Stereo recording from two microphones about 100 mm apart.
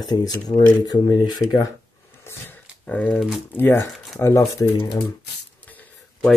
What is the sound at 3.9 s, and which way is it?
Shuffling cards, 5° left (ahead or behind).